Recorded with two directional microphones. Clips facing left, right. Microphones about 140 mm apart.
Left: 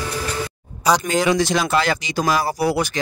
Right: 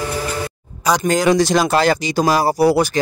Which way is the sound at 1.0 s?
40° right (ahead or behind).